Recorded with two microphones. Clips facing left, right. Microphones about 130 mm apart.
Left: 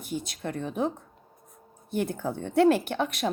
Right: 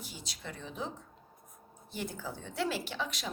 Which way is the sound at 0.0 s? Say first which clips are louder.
Left 12 dB; 55° left (ahead or behind).